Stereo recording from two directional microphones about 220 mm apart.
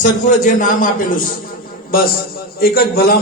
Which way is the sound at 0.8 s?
40° left (ahead or behind).